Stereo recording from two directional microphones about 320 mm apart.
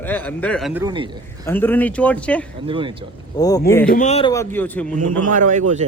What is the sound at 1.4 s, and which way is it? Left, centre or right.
A man's voice, centre.